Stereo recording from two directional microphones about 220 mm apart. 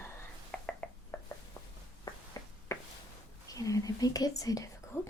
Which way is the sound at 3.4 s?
15° left (ahead or behind).